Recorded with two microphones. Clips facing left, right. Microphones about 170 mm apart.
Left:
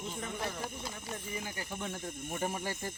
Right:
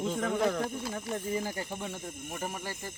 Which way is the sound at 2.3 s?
10° left (ahead or behind).